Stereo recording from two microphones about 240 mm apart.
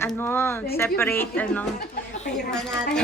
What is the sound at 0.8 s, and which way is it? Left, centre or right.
A woman's voice, centre.